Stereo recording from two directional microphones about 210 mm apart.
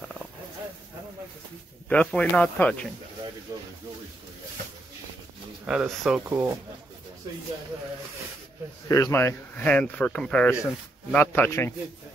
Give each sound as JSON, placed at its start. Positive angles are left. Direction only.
{"t": 1.9, "sound": "speech", "side_deg": 5}
{"t": 5.7, "sound": "speech", "side_deg": -5}
{"t": 8.8, "sound": "speech", "side_deg": 15}